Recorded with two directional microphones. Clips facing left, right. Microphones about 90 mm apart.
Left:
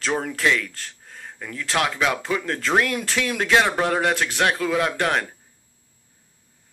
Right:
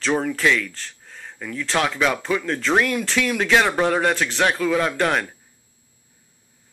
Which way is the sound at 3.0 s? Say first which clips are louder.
Right 3 dB; 30° left (ahead or behind).